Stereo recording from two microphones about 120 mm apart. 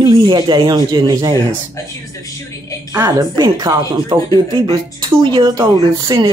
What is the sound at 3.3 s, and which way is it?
Speech, 35° right (ahead or behind).